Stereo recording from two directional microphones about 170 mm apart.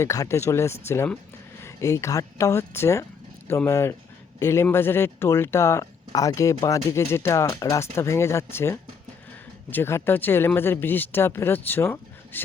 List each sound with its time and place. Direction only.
0.0 s speech: 15° left (ahead or behind)